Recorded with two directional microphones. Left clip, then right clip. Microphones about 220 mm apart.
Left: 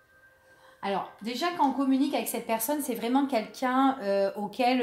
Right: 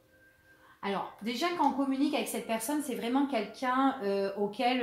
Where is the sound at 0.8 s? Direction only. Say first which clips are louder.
Left 3 dB; 35° left (ahead or behind).